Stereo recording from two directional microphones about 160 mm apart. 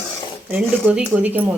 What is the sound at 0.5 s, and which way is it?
Speech, 10° right (ahead or behind).